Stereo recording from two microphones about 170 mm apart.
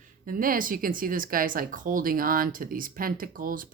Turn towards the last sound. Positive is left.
turn(degrees=-55)  # may be behind; listen again after turning